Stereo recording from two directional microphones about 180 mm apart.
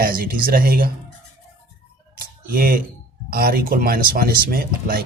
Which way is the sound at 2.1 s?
55° right (ahead or behind).